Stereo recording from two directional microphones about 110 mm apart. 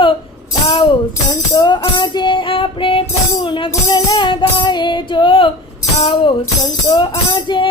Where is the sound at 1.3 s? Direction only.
40° left (ahead or behind).